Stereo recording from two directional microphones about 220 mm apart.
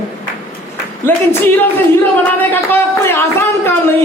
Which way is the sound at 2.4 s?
10° left (ahead or behind).